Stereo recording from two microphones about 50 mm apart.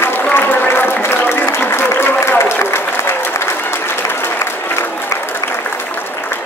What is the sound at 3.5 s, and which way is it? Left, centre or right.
Applause, left.